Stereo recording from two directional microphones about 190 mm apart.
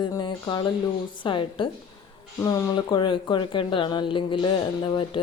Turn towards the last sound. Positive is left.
turn(degrees=25)  # may be behind; listen again after turning